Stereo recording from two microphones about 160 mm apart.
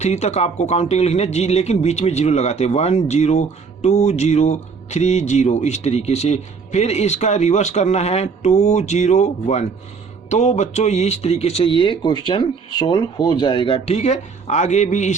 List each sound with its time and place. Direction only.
0.0 s speech: 45° left (ahead or behind)